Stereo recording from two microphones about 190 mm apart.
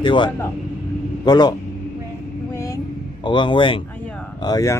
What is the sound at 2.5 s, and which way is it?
Vehicle, 15° left (ahead or behind).